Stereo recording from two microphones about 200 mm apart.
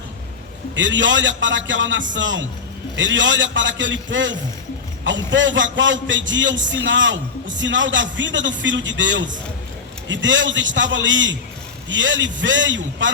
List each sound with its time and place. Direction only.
0.8 s a man's voice: 65° right (ahead or behind)